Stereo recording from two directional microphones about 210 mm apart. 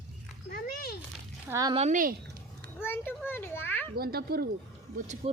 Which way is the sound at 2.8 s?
10° left (ahead or behind).